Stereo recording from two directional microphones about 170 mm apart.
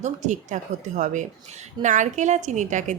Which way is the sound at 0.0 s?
45° right (ahead or behind).